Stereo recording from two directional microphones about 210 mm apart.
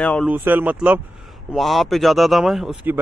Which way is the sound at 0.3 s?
10° right (ahead or behind).